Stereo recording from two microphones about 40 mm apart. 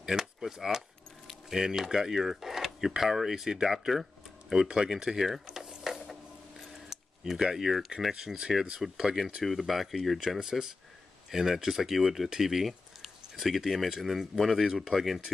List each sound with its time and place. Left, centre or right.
0.0 s speech: centre
5.2 s a sound: centre
7.5 s speech: centre